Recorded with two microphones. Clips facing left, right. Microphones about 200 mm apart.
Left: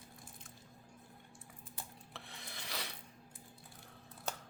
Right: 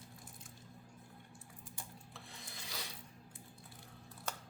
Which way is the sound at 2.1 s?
70° left (ahead or behind).